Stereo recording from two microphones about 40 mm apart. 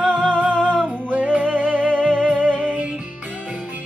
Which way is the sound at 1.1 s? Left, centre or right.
Right.